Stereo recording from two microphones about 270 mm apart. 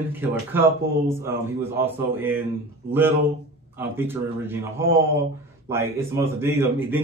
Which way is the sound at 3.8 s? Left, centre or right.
Centre.